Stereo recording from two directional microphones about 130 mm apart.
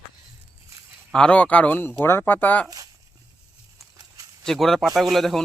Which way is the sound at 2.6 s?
25° right (ahead or behind).